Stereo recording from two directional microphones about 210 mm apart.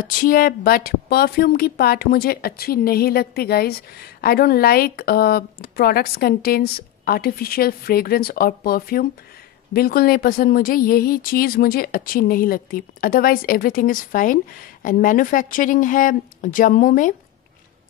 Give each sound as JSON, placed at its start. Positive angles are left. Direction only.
{"t": 0.0, "sound": "a woman's voice", "side_deg": 45}